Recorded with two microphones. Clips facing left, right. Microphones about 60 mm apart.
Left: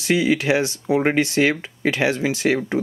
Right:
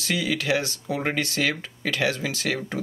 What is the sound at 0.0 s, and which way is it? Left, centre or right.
Speech, left.